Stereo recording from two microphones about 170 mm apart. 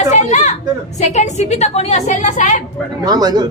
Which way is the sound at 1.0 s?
45° left (ahead or behind).